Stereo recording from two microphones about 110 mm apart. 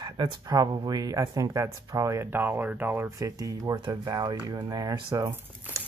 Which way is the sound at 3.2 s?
35° right (ahead or behind).